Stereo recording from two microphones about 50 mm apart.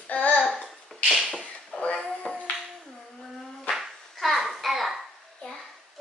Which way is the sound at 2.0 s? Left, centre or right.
Left.